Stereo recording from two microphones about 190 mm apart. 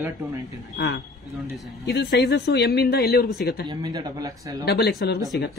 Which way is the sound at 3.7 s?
20° right (ahead or behind).